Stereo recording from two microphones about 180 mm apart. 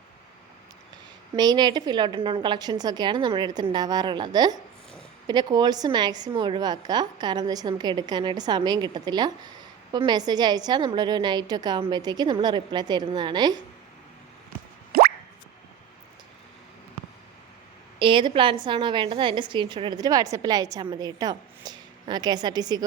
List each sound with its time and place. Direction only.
1.4 s a woman's voice: 25° right (ahead or behind)
14.9 s a sound: 60° right (ahead or behind)
18.0 s a woman's voice: 30° right (ahead or behind)